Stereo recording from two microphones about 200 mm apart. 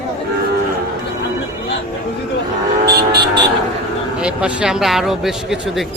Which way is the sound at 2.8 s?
55° right (ahead or behind).